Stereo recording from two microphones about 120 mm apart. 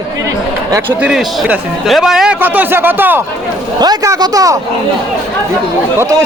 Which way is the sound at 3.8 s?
30° right (ahead or behind).